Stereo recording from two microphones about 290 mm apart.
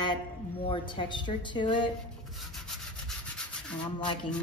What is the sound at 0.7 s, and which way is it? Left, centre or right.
A woman's voice, centre.